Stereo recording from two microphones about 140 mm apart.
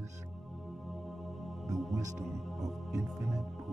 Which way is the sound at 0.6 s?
Centre (ahead or behind).